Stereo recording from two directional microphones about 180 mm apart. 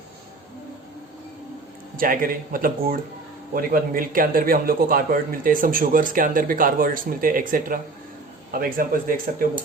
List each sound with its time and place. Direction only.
2.0 s a man's voice: 50° right (ahead or behind)